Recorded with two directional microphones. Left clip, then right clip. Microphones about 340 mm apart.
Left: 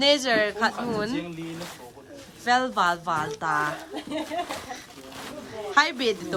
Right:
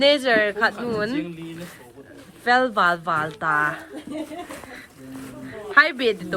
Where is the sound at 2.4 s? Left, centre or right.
Centre.